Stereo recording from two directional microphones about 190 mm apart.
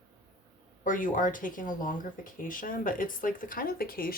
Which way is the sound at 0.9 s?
45° left (ahead or behind).